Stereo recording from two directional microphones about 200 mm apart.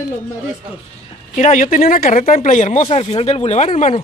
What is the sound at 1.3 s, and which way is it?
Speech, 40° left (ahead or behind).